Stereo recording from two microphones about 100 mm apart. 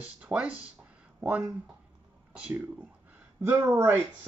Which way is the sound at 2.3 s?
10° right (ahead or behind).